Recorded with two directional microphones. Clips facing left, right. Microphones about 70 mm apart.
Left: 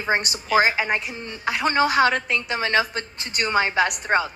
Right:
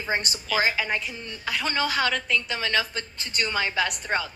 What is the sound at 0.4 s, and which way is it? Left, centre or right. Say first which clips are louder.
A woman's voice: left 6 dB; left.